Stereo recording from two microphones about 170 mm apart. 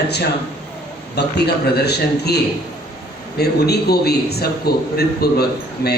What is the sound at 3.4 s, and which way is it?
A man's voice, 70° left (ahead or behind).